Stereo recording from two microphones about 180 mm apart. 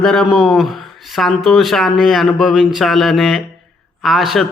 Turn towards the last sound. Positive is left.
turn(degrees=0)  # may be behind; listen again after turning